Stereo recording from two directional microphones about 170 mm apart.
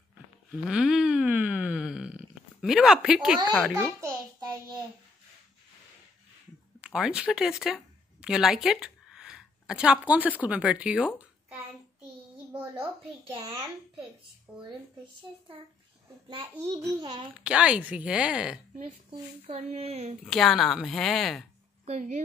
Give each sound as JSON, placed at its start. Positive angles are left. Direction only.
{"t": 0.5, "sound": "a sound", "side_deg": -5}
{"t": 4.0, "sound": "child singing", "side_deg": -25}
{"t": 6.8, "sound": "speech", "side_deg": -5}
{"t": 7.6, "sound": "a sound", "side_deg": 0}
{"t": 10.4, "sound": "speech", "side_deg": -5}
{"t": 14.5, "sound": "speech", "side_deg": -5}
{"t": 16.6, "sound": "a child's voice", "side_deg": -20}
{"t": 17.4, "sound": "speech", "side_deg": -5}
{"t": 19.0, "sound": "speech", "side_deg": -40}
{"t": 20.2, "sound": "speech", "side_deg": 0}
{"t": 21.8, "sound": "speech", "side_deg": -45}